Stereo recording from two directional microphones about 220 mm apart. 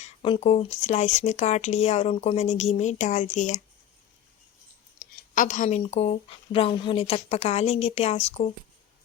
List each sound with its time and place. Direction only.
0.0 s speech: 25° left (ahead or behind)
5.3 s a woman's voice: 35° left (ahead or behind)